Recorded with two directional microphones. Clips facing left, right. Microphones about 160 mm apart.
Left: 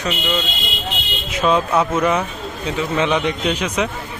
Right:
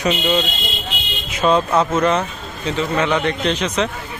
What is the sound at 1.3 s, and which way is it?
A man's voice, centre (ahead or behind).